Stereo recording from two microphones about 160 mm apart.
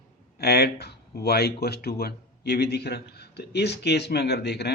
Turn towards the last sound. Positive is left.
turn(degrees=90)